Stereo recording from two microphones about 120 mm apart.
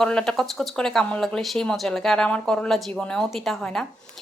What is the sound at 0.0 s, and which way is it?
Speech, 5° left (ahead or behind).